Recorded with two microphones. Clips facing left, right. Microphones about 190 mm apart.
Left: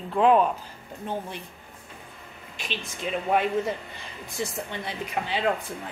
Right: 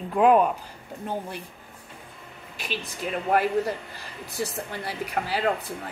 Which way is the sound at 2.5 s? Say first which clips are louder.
Right 2 dB; 5° right (ahead or behind).